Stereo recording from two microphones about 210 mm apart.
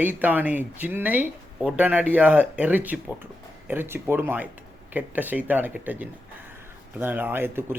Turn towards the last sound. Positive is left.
turn(degrees=-10)  # may be behind; listen again after turning